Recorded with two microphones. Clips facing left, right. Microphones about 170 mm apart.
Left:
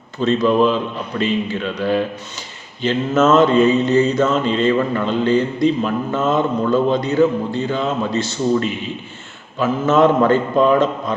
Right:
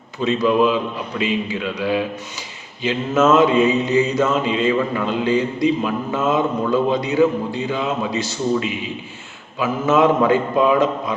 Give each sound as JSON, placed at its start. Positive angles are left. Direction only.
{"t": 0.2, "sound": "mantra", "side_deg": -5}